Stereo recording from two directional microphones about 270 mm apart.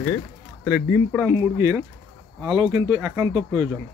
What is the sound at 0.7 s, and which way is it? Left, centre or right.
Speech, centre.